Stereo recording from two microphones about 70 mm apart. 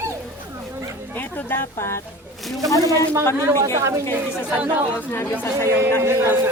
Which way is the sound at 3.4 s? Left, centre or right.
Right.